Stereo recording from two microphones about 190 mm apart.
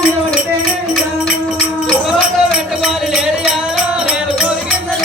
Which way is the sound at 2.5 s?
5° right (ahead or behind).